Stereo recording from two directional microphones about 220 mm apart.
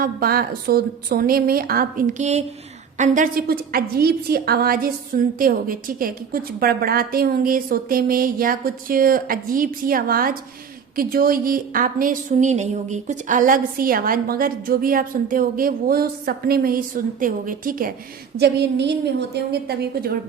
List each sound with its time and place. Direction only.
0.0 s a woman's voice: 45° right (ahead or behind)